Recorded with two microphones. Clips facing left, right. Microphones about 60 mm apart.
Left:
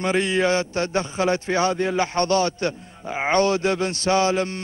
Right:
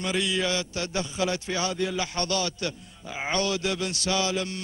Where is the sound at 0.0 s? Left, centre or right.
Left.